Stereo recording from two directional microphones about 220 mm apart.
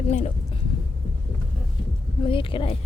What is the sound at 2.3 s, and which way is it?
Speech, 25° left (ahead or behind).